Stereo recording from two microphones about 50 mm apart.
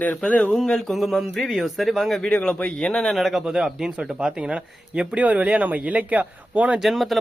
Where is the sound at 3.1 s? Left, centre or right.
Centre; by 6.8 s right.